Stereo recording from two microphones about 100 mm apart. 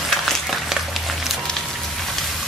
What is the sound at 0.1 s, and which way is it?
Music, centre (ahead or behind).